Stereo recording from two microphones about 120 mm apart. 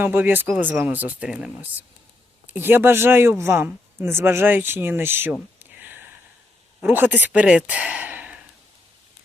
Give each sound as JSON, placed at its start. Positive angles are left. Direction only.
{"t": 0.0, "sound": "speech", "side_deg": -15}
{"t": 5.8, "sound": "a sound", "side_deg": -15}
{"t": 6.8, "sound": "speech", "side_deg": -15}